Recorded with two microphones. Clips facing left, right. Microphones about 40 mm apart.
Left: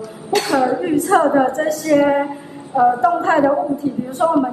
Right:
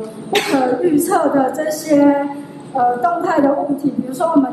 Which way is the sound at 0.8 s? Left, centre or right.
Left.